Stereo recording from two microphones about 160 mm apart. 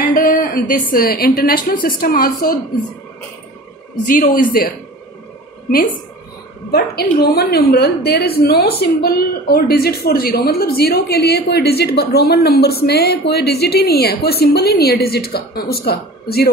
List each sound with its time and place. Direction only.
0.1 s a woman's voice: 65° left (ahead or behind)
4.1 s a woman's voice: 60° left (ahead or behind)
6.7 s a woman's voice: 80° left